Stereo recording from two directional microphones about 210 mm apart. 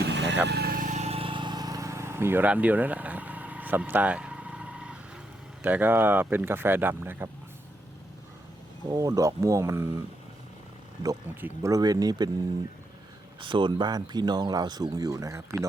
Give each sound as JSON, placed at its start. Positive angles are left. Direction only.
{"t": 0.0, "sound": "vehicle", "side_deg": -55}
{"t": 0.4, "sound": "a sound", "side_deg": -50}
{"t": 5.6, "sound": "speech", "side_deg": -10}
{"t": 8.9, "sound": "speech", "side_deg": -15}
{"t": 11.0, "sound": "speech", "side_deg": -15}
{"t": 13.4, "sound": "speech", "side_deg": -25}